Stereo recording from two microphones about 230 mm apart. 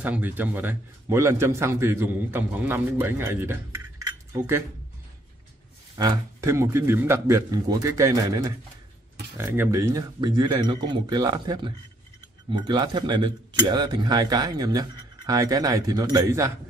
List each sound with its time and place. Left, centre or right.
0.0 s speech: centre
5.9 s speech: centre